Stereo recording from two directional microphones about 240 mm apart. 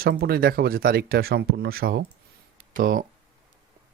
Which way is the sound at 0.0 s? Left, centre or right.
Right.